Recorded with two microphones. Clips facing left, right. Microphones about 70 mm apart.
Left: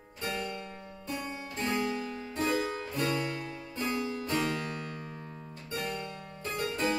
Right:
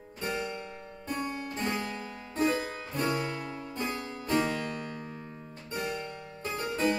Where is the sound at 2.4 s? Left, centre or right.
Centre.